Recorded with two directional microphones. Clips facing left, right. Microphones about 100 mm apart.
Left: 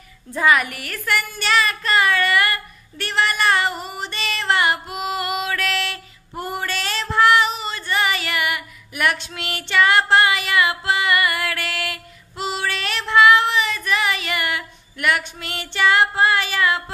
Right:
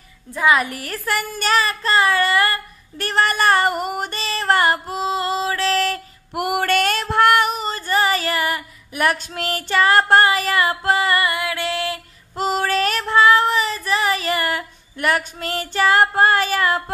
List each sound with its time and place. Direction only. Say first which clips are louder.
0.5 s speech: right 1 dB; 30° right (ahead or behind); by 4.2 s 50° right (ahead or behind)
4.2 s speech: right 2 dB; 35° right (ahead or behind)
6.3 s female singing: right 7 dB; 70° right (ahead or behind); by 11.3 s 35° right (ahead or behind)
11.3 s music: right 3 dB; 20° right (ahead or behind)
12.4 s child singing: right 6 dB; 45° right (ahead or behind)